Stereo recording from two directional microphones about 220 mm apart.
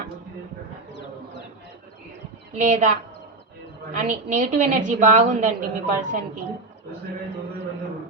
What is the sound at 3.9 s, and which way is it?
Speech, 35° right (ahead or behind).